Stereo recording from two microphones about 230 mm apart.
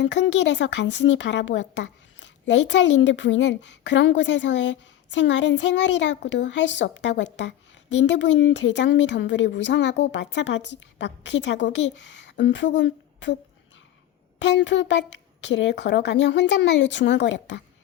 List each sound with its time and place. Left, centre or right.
0.0 s a child's voice: left
14.3 s a child's voice: left